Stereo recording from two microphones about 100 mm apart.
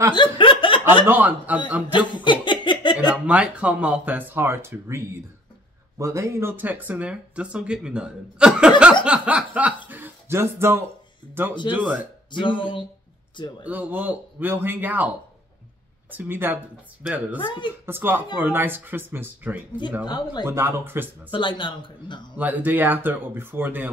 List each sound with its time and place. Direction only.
0.1 s chuckle: 55° left (ahead or behind)
1.0 s speech: 15° right (ahead or behind)
1.9 s a sound: 50° left (ahead or behind)
3.1 s a man's voice: 15° right (ahead or behind); by 6.5 s 30° right (ahead or behind)
6.5 s speech: 15° right (ahead or behind)
12.3 s speech: 55° left (ahead or behind)
13.7 s speech: 15° right (ahead or behind)
17.4 s speech: 55° left (ahead or behind)
17.8 s speech: 20° right (ahead or behind)
21.3 s speech: 55° left (ahead or behind)
22.4 s speech: 15° right (ahead or behind)